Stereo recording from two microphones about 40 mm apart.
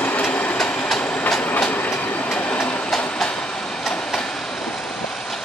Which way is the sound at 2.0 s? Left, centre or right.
Left.